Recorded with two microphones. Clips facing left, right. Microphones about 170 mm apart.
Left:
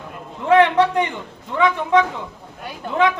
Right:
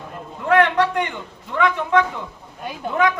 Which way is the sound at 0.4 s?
20° left (ahead or behind).